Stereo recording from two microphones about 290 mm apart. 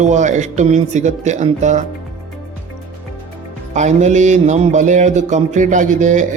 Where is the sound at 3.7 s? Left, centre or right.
Right.